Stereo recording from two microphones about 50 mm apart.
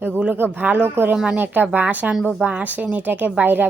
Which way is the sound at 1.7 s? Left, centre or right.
Right.